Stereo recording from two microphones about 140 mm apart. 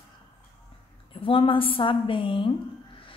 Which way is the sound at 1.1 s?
40° left (ahead or behind).